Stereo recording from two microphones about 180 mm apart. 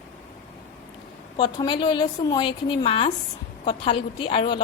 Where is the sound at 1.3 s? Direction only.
25° left (ahead or behind).